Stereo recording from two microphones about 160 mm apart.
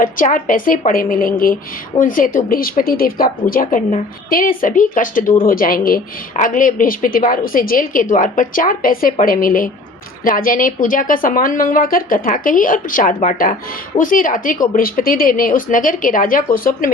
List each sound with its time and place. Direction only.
0.0 s speech: 60° left (ahead or behind)